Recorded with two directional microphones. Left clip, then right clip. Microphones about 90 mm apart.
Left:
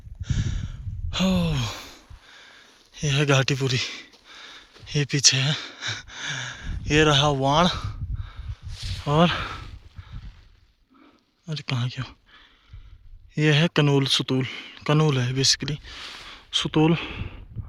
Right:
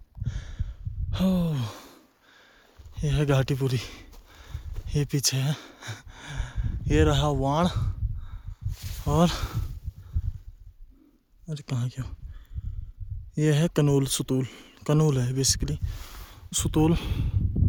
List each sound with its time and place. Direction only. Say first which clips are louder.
0.2 s sigh: left 9 dB; 20° right (ahead or behind)
1.9 s wheeze: left 7 dB; 35° right (ahead or behind)
2.9 s speech: left 5 dB; 5° right (ahead or behind); by 4.1 s 25° right (ahead or behind)
4.3 s a sound: left 8 dB; 20° right (ahead or behind)
6.9 s a man's voice: left 5 dB; centre (ahead or behind)
8.7 s a sound: left 8 dB; 25° right (ahead or behind)
9.0 s speech: left 4 dB; 15° right (ahead or behind)
11.4 s speech: left 6 dB; 5° right (ahead or behind)